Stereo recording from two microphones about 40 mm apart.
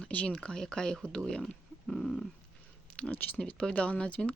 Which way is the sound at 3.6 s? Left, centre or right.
Left.